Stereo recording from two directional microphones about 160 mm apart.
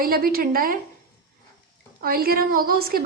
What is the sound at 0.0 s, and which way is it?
Speech, 65° right (ahead or behind).